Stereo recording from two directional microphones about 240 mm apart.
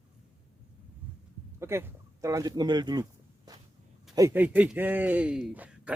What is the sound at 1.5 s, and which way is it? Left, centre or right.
A man's voice, centre.